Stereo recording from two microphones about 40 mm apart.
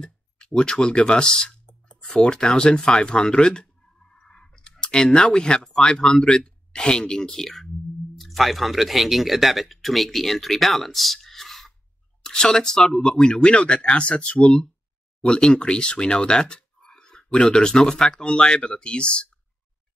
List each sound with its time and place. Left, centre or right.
0.0 s speech: centre
8.2 s speech: centre
12.2 s speech: centre